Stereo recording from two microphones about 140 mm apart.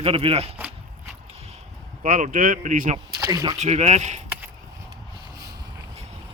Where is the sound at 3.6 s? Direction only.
50° right (ahead or behind).